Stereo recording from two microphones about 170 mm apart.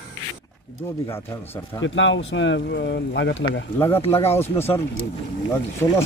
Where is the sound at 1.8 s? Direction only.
90° left.